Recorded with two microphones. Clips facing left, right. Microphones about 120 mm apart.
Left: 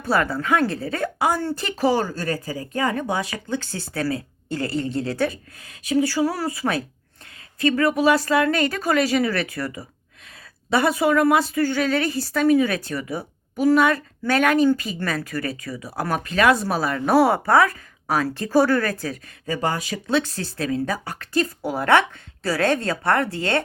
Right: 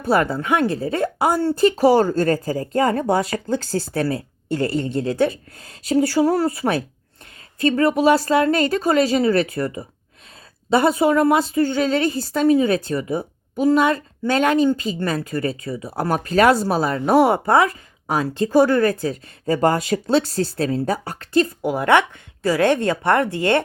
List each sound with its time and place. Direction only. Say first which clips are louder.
0.0 s a woman's voice: right 3 dB; 25° right (ahead or behind)
2.0 s a woman's voice: right 8 dB; 50° right (ahead or behind); by 19.3 s 25° right (ahead or behind)
19.5 s speech: right 7 dB; 40° right (ahead or behind); by 21.5 s 25° right (ahead or behind)
21.6 s a woman's voice: left 2 dB; 15° right (ahead or behind)